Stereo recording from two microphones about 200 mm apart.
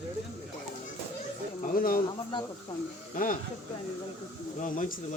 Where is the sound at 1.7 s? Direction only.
45° left (ahead or behind).